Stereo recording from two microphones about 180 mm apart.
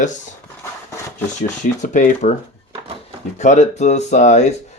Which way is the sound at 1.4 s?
45° left (ahead or behind).